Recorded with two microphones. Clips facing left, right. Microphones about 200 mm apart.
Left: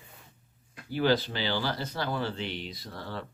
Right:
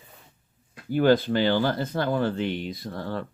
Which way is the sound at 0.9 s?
50° right (ahead or behind).